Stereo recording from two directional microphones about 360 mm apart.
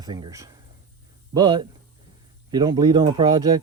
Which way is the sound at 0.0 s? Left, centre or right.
Centre.